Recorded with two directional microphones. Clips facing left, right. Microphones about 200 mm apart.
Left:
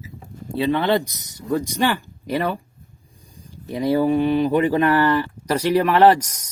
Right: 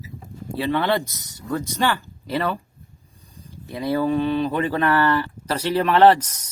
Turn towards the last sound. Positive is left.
turn(degrees=10)  # may be behind; listen again after turning